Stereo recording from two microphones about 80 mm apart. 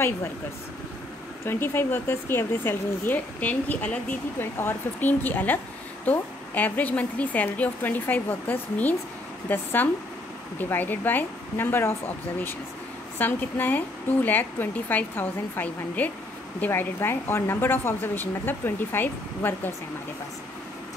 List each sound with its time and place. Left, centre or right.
1.4 s a woman's voice: left
4.4 s a woman's voice: left
13.2 s a woman's voice: left